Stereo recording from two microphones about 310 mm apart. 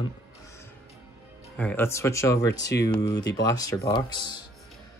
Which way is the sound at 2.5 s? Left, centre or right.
Left.